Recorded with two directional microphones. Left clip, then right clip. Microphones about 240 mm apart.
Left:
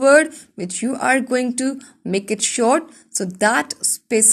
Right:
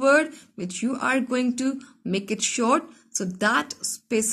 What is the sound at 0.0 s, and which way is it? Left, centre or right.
A woman's voice, left.